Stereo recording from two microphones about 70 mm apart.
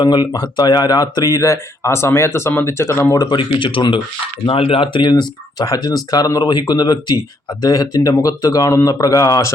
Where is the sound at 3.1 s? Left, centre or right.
Left.